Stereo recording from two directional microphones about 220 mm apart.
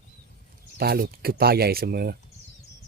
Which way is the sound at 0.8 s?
45° right (ahead or behind).